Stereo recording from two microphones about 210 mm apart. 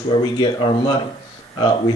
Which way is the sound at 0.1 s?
20° left (ahead or behind).